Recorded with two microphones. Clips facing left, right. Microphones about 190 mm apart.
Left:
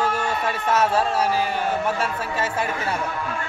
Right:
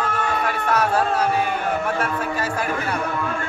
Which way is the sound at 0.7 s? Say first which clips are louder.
Even; 25° left (ahead or behind).